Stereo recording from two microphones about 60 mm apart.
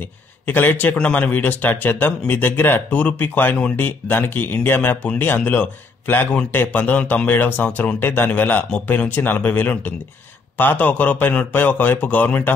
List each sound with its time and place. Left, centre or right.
0.5 s speech: left